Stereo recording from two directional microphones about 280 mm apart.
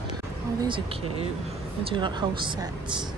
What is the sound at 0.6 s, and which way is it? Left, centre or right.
Speech, centre.